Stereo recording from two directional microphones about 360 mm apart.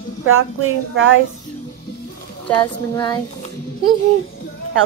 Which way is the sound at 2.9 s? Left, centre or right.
Centre.